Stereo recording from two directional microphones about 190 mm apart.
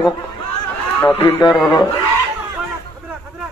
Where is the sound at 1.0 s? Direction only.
10° left (ahead or behind).